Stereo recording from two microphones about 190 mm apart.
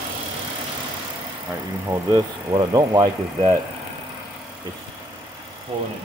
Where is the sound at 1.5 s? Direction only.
20° right (ahead or behind).